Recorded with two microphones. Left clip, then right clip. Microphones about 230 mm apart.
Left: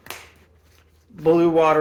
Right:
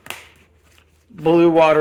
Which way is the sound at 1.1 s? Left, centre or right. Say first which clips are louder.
Right 3 dB; right.